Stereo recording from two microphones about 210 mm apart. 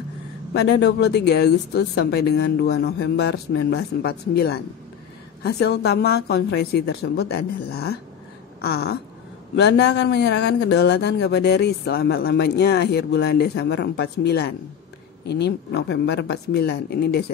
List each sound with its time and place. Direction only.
0.5 s speech: 55° left (ahead or behind)